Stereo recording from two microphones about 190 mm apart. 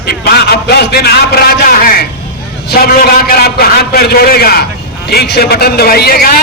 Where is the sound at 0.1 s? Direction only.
55° left (ahead or behind).